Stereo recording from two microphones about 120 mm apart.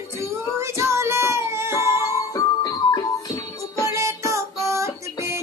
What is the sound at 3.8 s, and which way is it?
Music, 25° right (ahead or behind).